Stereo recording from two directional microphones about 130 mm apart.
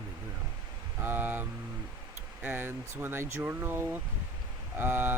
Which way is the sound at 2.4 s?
15° right (ahead or behind).